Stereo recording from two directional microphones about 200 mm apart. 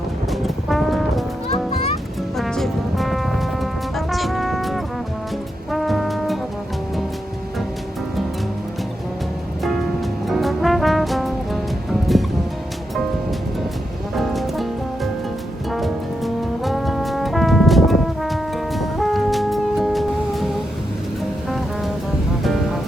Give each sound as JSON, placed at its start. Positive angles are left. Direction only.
{"t": 0.3, "sound": "music", "side_deg": 0}
{"t": 1.5, "sound": "music", "side_deg": 30}
{"t": 2.4, "sound": "music", "side_deg": 0}
{"t": 10.2, "sound": "music", "side_deg": 0}
{"t": 14.2, "sound": "music", "side_deg": 0}
{"t": 15.7, "sound": "brass instrument", "side_deg": 0}